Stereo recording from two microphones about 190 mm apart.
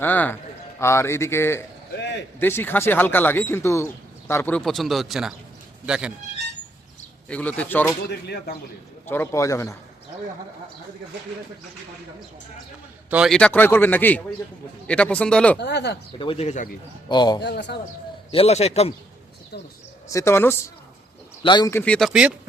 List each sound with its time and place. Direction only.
0.0 s speech: 10° left (ahead or behind)
7.3 s speech: 5° left (ahead or behind)
8.1 s speech: 55° left (ahead or behind)
9.0 s speech: 10° left (ahead or behind)
13.1 s speech: 5° right (ahead or behind)
15.5 s speech: 60° left (ahead or behind)
16.1 s a man's voice: 30° left (ahead or behind)
17.1 s speech: 20° left (ahead or behind)
17.4 s speech: 60° left (ahead or behind)
18.3 s a man's voice: 30° left (ahead or behind)
20.1 s speech: 15° left (ahead or behind); by 22.3 s centre (ahead or behind)